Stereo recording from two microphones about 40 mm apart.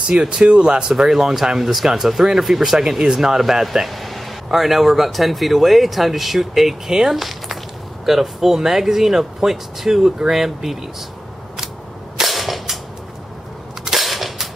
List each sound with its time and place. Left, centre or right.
0.1 s speech: right
1.1 s speech: centre
12.2 s cap gun: centre
13.8 s cap gun: centre